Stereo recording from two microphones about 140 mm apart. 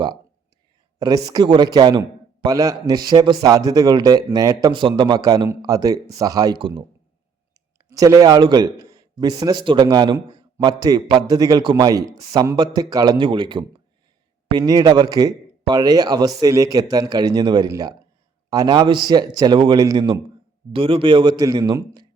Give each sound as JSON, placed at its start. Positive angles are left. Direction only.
{"t": 0.9, "sound": "a man's voice", "side_deg": -30}
{"t": 7.9, "sound": "a man's voice", "side_deg": -25}
{"t": 20.7, "sound": "a man's voice", "side_deg": -40}